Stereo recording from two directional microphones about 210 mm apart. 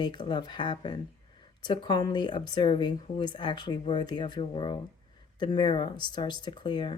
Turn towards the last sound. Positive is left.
turn(degrees=20)  # may be behind; listen again after turning